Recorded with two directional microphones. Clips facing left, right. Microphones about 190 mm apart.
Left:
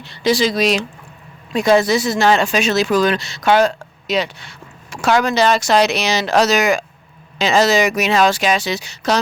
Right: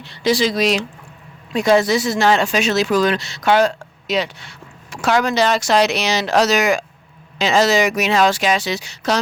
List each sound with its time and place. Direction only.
0.1 s speech: 45° left (ahead or behind)